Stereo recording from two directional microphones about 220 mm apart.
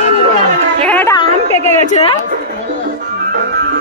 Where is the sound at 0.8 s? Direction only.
5° left (ahead or behind).